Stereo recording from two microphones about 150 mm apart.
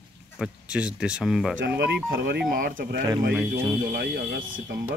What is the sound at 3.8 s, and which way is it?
Speech, 90° right.